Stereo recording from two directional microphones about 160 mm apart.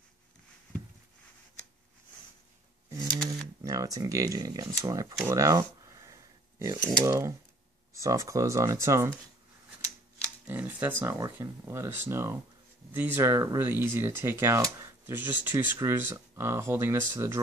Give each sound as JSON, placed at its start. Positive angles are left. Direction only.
{"t": 3.6, "sound": "speech", "side_deg": -20}
{"t": 5.2, "sound": "a sound", "side_deg": -20}
{"t": 6.6, "sound": "speech", "side_deg": -20}
{"t": 10.4, "sound": "speech", "side_deg": -10}